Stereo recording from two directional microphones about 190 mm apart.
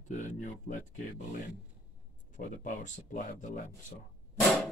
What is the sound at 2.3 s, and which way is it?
Speech, 40° left (ahead or behind).